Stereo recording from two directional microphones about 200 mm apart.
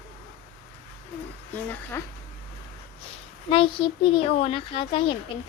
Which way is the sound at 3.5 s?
25° left (ahead or behind).